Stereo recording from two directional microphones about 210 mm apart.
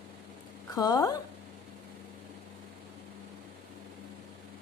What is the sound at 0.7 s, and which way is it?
Speech, 20° left (ahead or behind).